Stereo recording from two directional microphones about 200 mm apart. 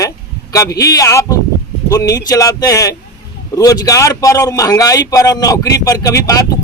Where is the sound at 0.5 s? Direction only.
15° left (ahead or behind).